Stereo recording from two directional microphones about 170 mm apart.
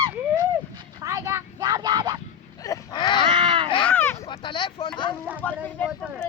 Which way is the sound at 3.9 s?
10° left (ahead or behind).